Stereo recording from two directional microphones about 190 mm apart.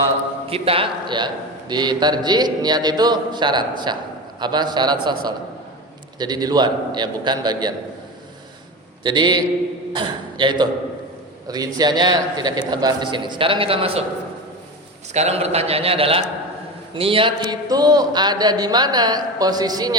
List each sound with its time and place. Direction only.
0.5 s a man's voice: 30° right (ahead or behind)
9.0 s a man's voice: 25° right (ahead or behind)
15.1 s a man's voice: 35° right (ahead or behind)